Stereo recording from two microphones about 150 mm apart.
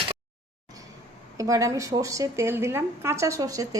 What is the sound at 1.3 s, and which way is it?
A woman's voice, 20° right (ahead or behind).